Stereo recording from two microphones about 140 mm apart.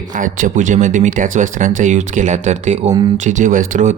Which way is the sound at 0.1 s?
70° right (ahead or behind).